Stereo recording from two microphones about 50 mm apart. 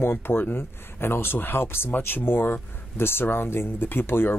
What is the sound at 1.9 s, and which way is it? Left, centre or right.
Speech, left.